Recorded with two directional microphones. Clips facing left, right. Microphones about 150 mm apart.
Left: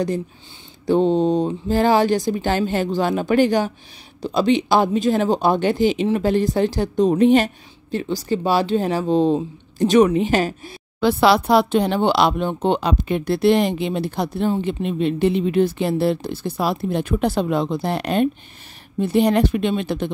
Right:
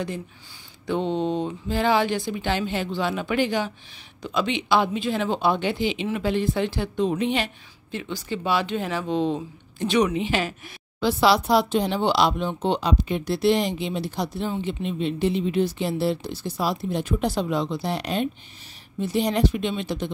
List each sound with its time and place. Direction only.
0.8 s speech: 35° left (ahead or behind)
11.0 s speech: 55° left (ahead or behind)